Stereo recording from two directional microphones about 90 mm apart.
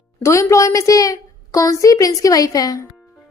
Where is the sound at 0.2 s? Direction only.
35° left (ahead or behind).